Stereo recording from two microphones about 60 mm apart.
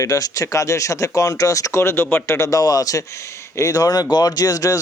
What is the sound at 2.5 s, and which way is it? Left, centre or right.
Speech, left.